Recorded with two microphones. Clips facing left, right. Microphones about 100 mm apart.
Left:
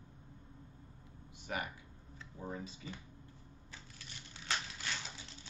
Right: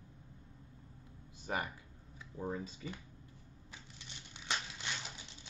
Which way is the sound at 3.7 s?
20° right (ahead or behind).